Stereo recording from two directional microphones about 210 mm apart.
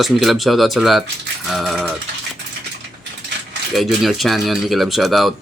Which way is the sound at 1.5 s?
Centre (ahead or behind).